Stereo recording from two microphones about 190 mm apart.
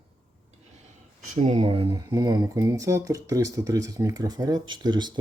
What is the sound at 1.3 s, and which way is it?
Speech, 35° right (ahead or behind).